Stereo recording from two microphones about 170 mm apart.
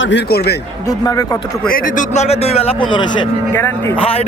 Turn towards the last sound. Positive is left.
turn(degrees=35)  # may be behind; listen again after turning